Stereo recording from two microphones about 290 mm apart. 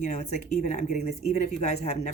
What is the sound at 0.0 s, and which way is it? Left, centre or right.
Speech, left.